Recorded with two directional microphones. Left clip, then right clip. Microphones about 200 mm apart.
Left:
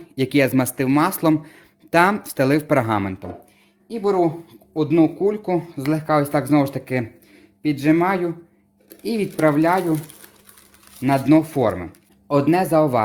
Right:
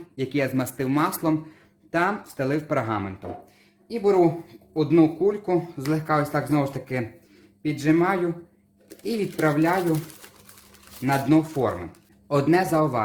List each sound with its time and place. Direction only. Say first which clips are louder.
0.2 s speech: left 7 dB; 50° left (ahead or behind)
3.8 s speech: left 1 dB; 30° left (ahead or behind); by 9.7 s 50° left (ahead or behind)
11.0 s speech: left 5 dB; 50° left (ahead or behind)